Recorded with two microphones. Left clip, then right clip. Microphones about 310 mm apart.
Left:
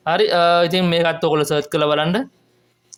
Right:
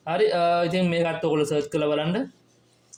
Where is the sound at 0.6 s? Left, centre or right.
Left.